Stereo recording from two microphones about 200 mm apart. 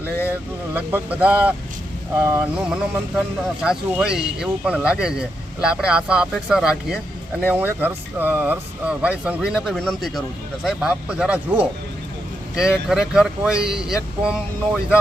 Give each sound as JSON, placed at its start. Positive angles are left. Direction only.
{"t": 0.0, "sound": "vehicle", "side_deg": 10}
{"t": 0.3, "sound": "speech", "side_deg": -10}